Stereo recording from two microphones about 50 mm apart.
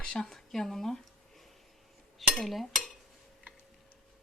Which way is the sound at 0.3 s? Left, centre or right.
Centre.